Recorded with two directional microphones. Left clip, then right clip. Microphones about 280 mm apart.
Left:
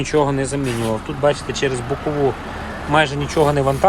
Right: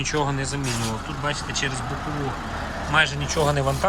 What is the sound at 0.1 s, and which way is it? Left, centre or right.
Speech, centre.